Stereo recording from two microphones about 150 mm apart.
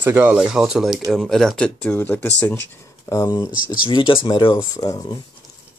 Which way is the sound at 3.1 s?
25° left (ahead or behind).